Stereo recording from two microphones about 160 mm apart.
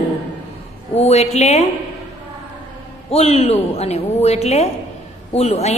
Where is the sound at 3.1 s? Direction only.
40° left (ahead or behind).